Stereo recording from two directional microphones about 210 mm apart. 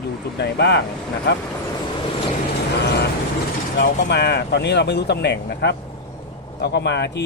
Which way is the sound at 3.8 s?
50° left (ahead or behind).